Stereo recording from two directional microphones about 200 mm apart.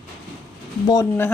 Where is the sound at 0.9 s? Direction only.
15° left (ahead or behind).